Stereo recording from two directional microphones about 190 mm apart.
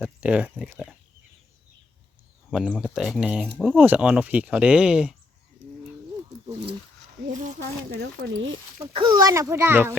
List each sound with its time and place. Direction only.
0.0 s speech: 5° right (ahead or behind)
2.5 s speech: centre (ahead or behind)
7.3 s speech: 40° right (ahead or behind)
8.0 s speech: 70° right (ahead or behind)
8.9 s speech: 25° right (ahead or behind)